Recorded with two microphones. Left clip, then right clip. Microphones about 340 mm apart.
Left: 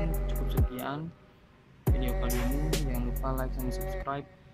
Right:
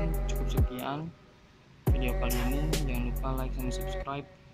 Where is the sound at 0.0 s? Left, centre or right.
Centre.